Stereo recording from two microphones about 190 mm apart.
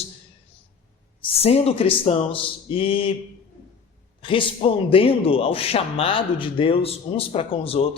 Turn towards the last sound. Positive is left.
turn(degrees=30)  # may be behind; listen again after turning